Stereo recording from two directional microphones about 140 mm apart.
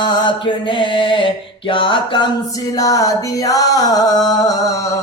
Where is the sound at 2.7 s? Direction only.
25° left (ahead or behind).